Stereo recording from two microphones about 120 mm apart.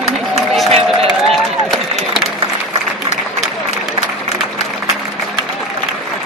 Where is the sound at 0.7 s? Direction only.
55° right (ahead or behind).